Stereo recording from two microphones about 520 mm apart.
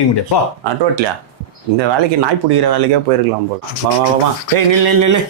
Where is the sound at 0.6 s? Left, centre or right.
Right.